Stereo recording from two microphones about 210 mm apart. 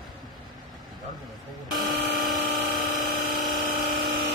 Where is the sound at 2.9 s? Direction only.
40° right (ahead or behind).